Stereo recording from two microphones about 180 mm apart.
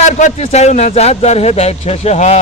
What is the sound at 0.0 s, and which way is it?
Speech, 40° left (ahead or behind).